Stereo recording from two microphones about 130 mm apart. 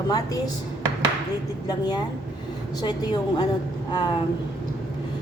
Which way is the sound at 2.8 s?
30° left (ahead or behind).